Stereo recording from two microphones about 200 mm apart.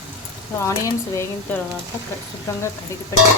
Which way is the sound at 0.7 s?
15° left (ahead or behind).